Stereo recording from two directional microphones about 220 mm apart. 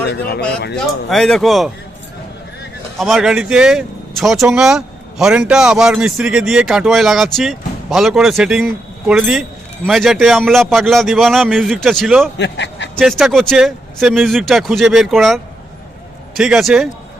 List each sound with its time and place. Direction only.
0.1 s speech: 45° left (ahead or behind)
1.1 s speech: centre (ahead or behind)
3.0 s speech: centre (ahead or behind)
12.4 s a man's voice: 55° left (ahead or behind)
13.0 s speech: centre (ahead or behind)
16.4 s speech: centre (ahead or behind)